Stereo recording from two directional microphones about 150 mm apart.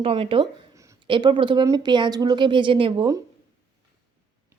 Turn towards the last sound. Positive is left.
turn(degrees=-30)  # may be behind; listen again after turning